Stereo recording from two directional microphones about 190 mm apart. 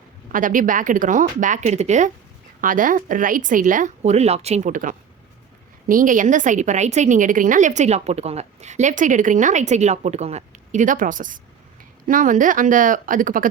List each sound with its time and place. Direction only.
0.3 s a woman's voice: 45° right (ahead or behind)